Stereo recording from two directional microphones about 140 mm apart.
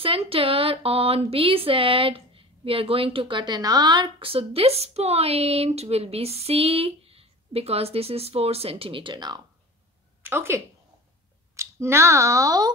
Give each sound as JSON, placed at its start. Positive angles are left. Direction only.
{"t": 0.0, "sound": "speech", "side_deg": -40}
{"t": 10.2, "sound": "speech", "side_deg": -15}